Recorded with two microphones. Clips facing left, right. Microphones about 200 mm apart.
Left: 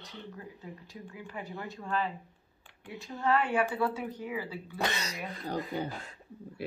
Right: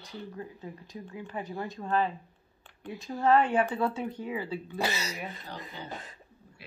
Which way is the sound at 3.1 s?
35° right (ahead or behind).